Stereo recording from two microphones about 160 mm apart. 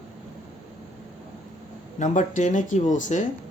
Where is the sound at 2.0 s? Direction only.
50° left (ahead or behind).